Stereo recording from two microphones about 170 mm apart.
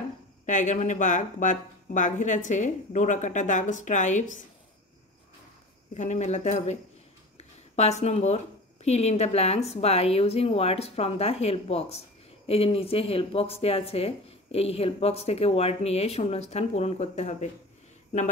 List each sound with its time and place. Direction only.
0.5 s speech: 45° left (ahead or behind)
5.9 s speech: 40° left (ahead or behind)
7.3 s a sound: 40° left (ahead or behind)
8.8 s speech: 40° left (ahead or behind)